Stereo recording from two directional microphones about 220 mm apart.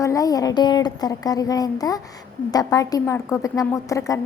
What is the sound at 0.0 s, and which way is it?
A woman's voice, 15° left (ahead or behind).